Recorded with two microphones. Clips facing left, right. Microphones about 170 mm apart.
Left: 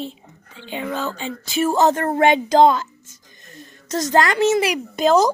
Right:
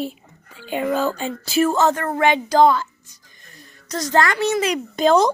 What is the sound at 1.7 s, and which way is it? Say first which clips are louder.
A woman's voice: left 2 dB; 15° left (ahead or behind).